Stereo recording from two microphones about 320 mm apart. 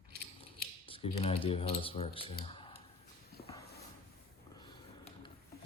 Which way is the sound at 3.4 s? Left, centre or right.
Centre.